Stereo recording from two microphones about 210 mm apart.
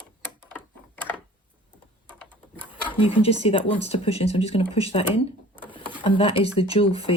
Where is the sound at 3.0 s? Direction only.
25° left (ahead or behind).